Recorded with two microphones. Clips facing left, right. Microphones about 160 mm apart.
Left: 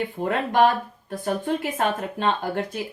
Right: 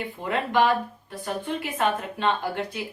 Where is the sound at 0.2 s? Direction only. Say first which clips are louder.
Left 3 dB; 45° left (ahead or behind).